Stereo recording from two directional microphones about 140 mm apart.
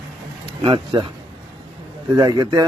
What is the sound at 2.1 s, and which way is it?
Speech, 25° right (ahead or behind).